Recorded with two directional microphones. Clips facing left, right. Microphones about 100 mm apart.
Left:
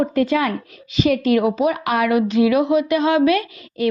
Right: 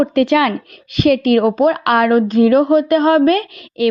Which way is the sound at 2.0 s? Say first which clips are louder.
Right 3 dB; 45° right (ahead or behind).